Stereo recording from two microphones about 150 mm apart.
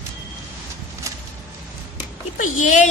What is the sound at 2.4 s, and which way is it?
Speech, 60° left (ahead or behind).